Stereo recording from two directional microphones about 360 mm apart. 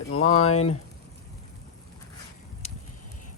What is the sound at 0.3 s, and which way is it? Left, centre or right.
Speech, centre.